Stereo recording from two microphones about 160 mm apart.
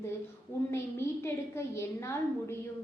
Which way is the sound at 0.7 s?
15° left (ahead or behind).